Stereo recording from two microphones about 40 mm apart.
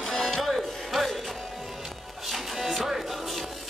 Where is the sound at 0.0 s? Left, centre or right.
Centre.